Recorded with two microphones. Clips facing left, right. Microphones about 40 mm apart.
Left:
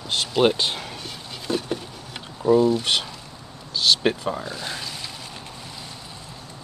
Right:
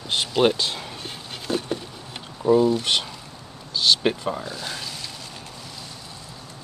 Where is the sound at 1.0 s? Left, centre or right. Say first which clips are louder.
Even; right.